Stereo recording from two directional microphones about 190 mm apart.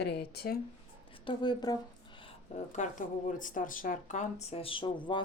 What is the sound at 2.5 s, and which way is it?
Speech, 40° left (ahead or behind).